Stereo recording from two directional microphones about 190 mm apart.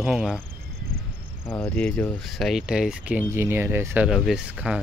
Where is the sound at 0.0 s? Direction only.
Centre (ahead or behind).